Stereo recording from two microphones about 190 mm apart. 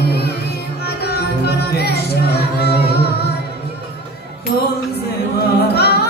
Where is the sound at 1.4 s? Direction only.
60° left (ahead or behind).